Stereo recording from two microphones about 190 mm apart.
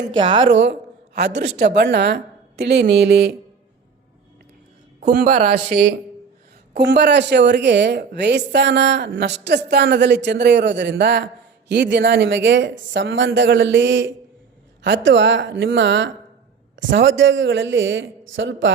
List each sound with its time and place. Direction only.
0.2 s a woman's voice: 25° right (ahead or behind)
0.5 s a woman's voice: 65° right (ahead or behind)
4.9 s speech: 45° right (ahead or behind)
6.7 s a woman's voice: 65° right (ahead or behind)